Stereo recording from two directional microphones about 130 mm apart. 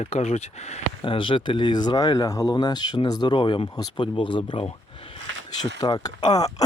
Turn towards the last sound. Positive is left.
turn(degrees=30)  # may be behind; listen again after turning